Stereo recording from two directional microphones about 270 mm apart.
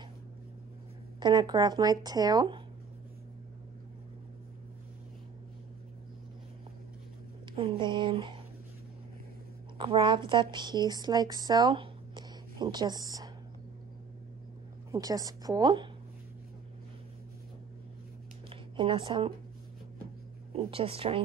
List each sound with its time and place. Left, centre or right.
1.2 s speech: centre
7.5 s speech: centre
9.8 s a woman's voice: centre
14.9 s speech: centre
18.5 s speech: centre
20.5 s speech: right